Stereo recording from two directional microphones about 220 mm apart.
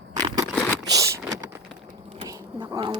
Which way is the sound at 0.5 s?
5° left (ahead or behind).